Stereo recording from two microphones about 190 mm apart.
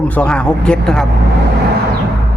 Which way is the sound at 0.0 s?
5° left (ahead or behind).